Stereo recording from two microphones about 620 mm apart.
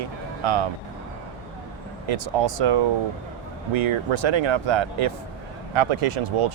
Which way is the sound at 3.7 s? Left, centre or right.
Right.